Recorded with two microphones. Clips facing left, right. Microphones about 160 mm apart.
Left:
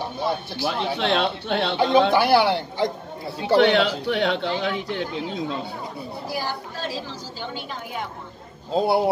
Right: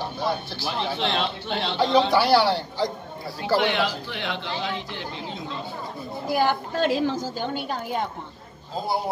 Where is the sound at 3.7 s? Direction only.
70° left (ahead or behind).